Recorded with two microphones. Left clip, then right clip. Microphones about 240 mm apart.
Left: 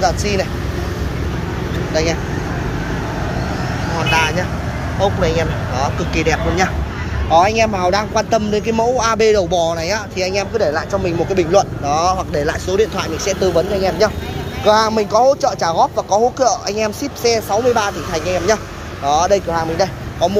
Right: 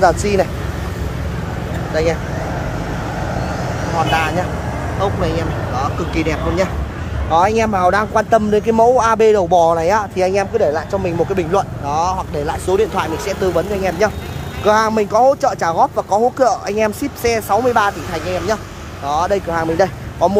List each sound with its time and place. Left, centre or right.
0.2 s speech: right
4.1 s speech: centre
15.8 s speech: right
16.6 s speech: centre
19.5 s speech: right